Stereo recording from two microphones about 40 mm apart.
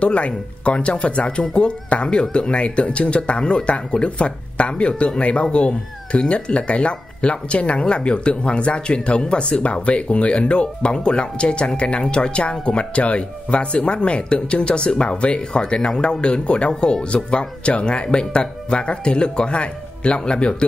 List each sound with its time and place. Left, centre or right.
0.0 s speech: left